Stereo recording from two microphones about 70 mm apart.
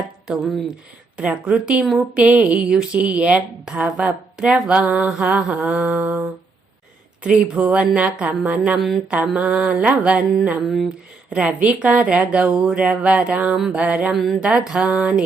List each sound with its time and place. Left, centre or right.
1.1 s a woman's voice: centre
11.3 s a woman's voice: centre